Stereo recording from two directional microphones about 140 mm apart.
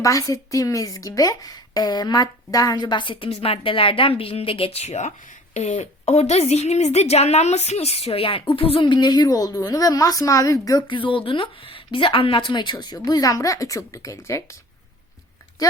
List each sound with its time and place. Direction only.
0.0 s a woman's voice: 25° left (ahead or behind)